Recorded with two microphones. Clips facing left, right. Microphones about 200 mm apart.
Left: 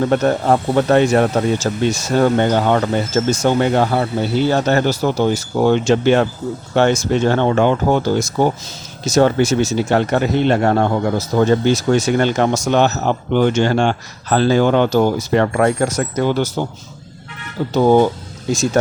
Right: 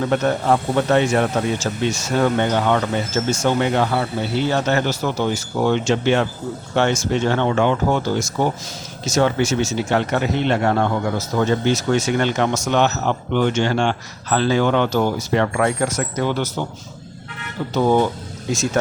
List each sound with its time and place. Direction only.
0.1 s speech: 40° left (ahead or behind)
17.7 s speech: 35° left (ahead or behind)